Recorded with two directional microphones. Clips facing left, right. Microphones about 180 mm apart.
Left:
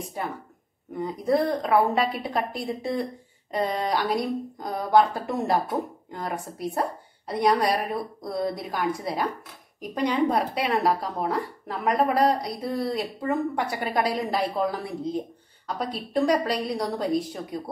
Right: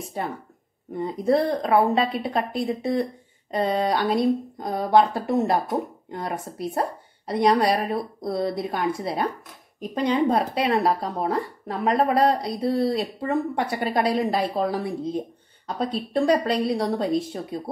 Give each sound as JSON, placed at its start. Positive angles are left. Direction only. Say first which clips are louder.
{"t": 0.9, "sound": "a woman's voice", "louder": "right 2 dB", "side_deg": -25}